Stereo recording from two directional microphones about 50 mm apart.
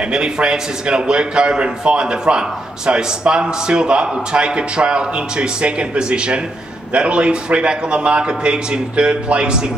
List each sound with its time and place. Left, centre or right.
0.1 s a man's voice: centre